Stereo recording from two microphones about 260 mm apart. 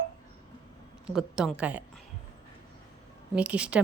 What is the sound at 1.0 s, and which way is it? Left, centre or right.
Speech, centre.